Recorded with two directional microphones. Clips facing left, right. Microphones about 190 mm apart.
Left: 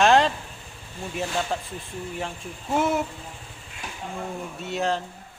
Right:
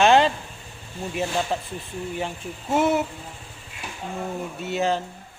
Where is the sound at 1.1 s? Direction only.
Centre (ahead or behind).